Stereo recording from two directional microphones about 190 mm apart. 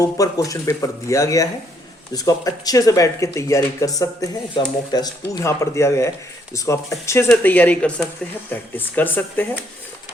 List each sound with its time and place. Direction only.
0.0 s speech: 20° left (ahead or behind)